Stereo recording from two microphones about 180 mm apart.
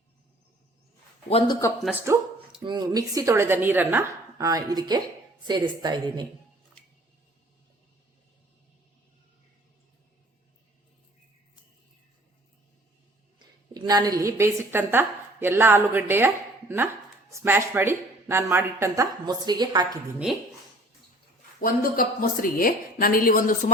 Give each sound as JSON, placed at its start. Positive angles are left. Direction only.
{"t": 1.3, "sound": "speech", "side_deg": 30}
{"t": 2.1, "sound": "a woman's voice", "side_deg": -15}
{"t": 13.4, "sound": "a woman's voice", "side_deg": -25}
{"t": 20.3, "sound": "speech", "side_deg": 0}
{"t": 21.6, "sound": "speech", "side_deg": 50}